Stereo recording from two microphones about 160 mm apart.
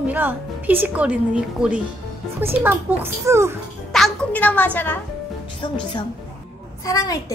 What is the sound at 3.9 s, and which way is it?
A woman's voice, 5° left (ahead or behind).